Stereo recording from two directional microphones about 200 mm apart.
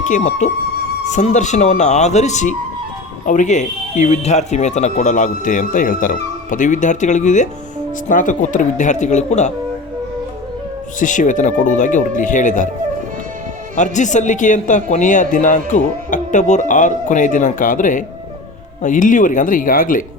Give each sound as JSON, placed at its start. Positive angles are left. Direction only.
{"t": 0.0, "sound": "speech", "side_deg": 35}
{"t": 11.0, "sound": "speech", "side_deg": 40}
{"t": 13.7, "sound": "speech", "side_deg": 35}